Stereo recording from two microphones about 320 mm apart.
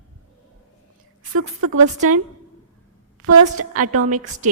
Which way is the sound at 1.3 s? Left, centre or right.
Right.